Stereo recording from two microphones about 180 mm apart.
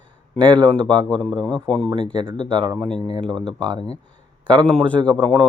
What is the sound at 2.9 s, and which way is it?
Speech, 25° right (ahead or behind).